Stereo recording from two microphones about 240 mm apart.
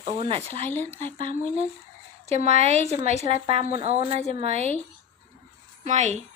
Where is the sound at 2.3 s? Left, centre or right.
Right.